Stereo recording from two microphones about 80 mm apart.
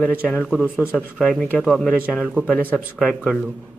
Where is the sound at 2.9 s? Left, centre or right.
Centre.